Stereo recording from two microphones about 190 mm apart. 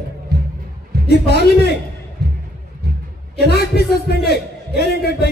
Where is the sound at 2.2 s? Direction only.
55° right (ahead or behind).